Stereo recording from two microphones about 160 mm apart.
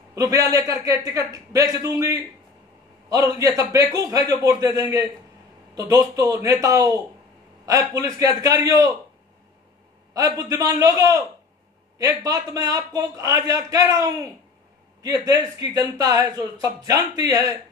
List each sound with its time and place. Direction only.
0.1 s a man's voice: 20° right (ahead or behind)
10.1 s a man's voice: 20° right (ahead or behind)